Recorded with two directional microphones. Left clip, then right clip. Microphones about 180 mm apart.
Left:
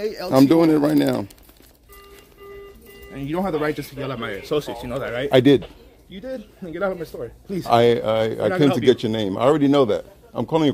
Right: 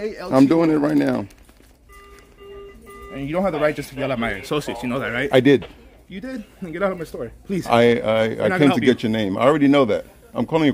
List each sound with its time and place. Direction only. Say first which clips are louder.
0.0 s speech: left 2 dB; 35° left (ahead or behind)
0.3 s speech: left 1 dB; 10° left (ahead or behind)
3.1 s speech: right 2 dB; 10° right (ahead or behind); by 4.2 s 45° right (ahead or behind)
4.2 s a man's voice: right 1 dB; 70° right (ahead or behind)
5.3 s speech: even; 10° left (ahead or behind)
6.0 s a man's voice: left 1 dB; 65° right (ahead or behind)
7.6 s a man's voice: even; 5° left (ahead or behind)